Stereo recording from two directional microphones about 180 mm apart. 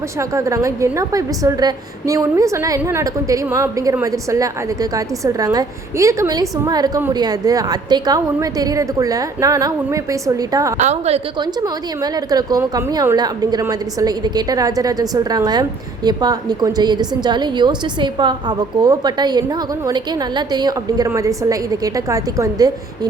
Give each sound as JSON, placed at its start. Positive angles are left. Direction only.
{"t": 0.2, "sound": "a woman's voice", "side_deg": -15}
{"t": 10.8, "sound": "a woman's voice", "side_deg": -35}
{"t": 11.3, "sound": "a woman's voice", "side_deg": -20}